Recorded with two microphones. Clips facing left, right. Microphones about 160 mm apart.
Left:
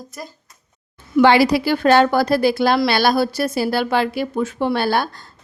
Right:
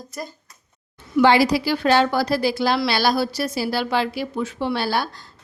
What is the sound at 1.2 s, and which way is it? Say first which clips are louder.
A woman's voice: left 3 dB; 65° left (ahead or behind).